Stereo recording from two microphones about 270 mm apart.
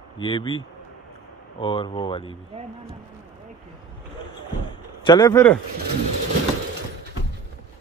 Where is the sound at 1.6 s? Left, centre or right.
Centre.